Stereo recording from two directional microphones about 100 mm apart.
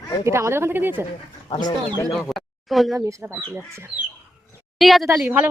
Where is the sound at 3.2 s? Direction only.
25° right (ahead or behind).